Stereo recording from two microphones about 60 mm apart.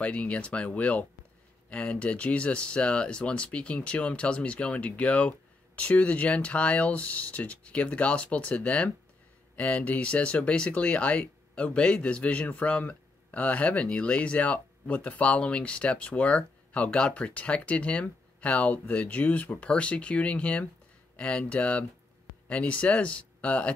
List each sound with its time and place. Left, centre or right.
0.0 s speech: left